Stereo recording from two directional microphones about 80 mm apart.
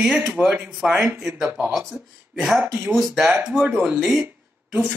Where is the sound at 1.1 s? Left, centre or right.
Centre.